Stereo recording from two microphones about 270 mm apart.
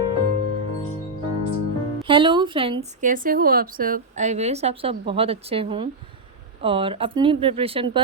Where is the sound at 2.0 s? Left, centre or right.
Centre.